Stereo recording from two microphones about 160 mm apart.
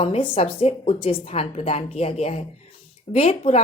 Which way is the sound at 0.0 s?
35° left (ahead or behind).